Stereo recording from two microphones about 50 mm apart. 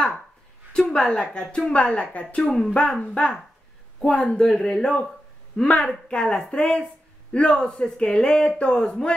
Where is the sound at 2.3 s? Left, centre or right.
Centre.